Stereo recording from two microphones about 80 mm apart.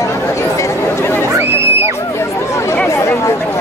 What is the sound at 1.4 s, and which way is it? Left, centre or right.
Music, right.